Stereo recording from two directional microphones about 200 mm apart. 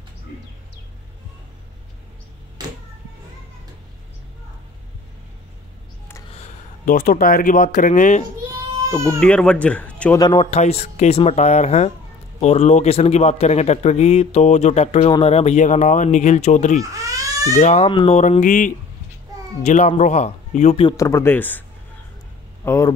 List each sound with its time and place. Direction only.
6.3 s speech: 40° left (ahead or behind)
9.2 s speech: 5° left (ahead or behind)
10.1 s speech: 20° left (ahead or behind)
16.9 s cat: 15° right (ahead or behind)
17.6 s speech: 35° left (ahead or behind)
20.9 s speech: 15° left (ahead or behind)
22.7 s speech: 15° left (ahead or behind)